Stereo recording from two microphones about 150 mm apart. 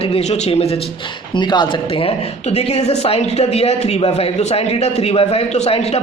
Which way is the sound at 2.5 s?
45° left (ahead or behind).